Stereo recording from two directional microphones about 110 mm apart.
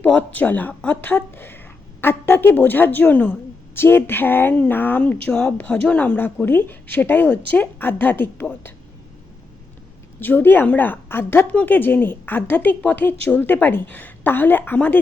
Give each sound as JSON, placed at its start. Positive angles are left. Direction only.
{"t": 0.0, "sound": "a woman's voice", "side_deg": 15}
{"t": 10.2, "sound": "a woman's voice", "side_deg": 15}